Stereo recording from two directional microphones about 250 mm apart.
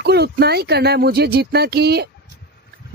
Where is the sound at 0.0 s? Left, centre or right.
Right.